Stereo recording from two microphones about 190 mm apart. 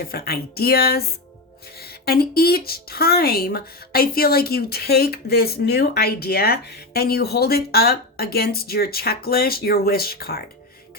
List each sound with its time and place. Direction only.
0.0 s a woman's voice: 50° left (ahead or behind)